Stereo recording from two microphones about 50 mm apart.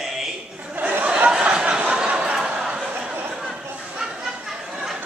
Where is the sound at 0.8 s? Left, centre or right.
Right.